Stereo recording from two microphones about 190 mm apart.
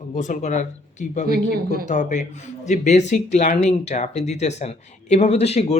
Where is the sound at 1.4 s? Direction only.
50° right (ahead or behind).